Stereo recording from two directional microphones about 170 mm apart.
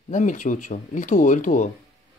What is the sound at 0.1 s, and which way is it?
Speech, 45° left (ahead or behind).